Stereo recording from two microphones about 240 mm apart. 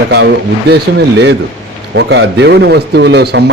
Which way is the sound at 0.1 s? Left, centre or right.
Right.